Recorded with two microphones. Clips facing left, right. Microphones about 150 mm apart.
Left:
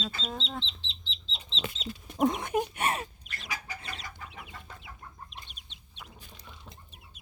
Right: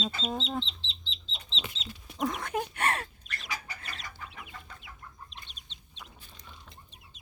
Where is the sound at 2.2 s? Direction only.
15° left (ahead or behind).